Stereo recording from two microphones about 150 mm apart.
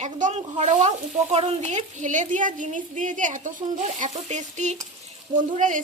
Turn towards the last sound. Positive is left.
turn(degrees=-60)  # may be behind; listen again after turning